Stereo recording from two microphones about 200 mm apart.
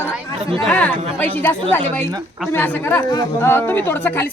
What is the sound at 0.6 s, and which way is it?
Speech, 5° left (ahead or behind).